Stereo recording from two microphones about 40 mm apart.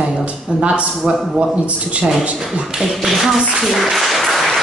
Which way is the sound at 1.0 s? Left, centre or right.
Centre.